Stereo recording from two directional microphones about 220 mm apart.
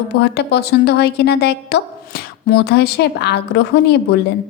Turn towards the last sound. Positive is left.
turn(degrees=50)  # may be behind; listen again after turning